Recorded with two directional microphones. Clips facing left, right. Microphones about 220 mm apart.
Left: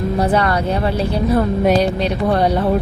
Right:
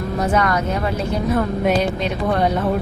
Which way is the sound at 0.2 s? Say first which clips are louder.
Left 1 dB; 30° left (ahead or behind).